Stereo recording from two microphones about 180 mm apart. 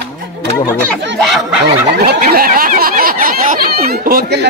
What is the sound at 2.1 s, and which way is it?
Speech, 55° right (ahead or behind).